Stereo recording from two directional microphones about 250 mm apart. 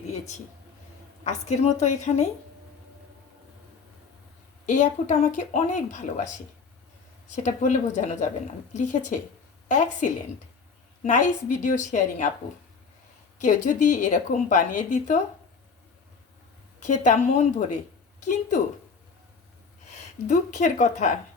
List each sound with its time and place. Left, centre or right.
1.2 s a woman's voice: left
4.6 s a woman's voice: left
13.4 s a woman's voice: left
16.8 s a woman's voice: left
20.2 s a woman's voice: left